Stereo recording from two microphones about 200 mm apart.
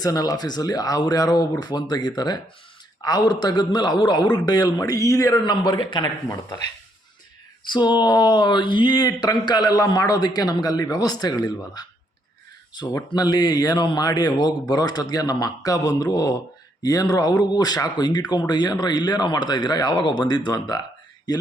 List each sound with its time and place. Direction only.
0.0 s speech: 20° left (ahead or behind)
7.7 s speech: 20° left (ahead or behind)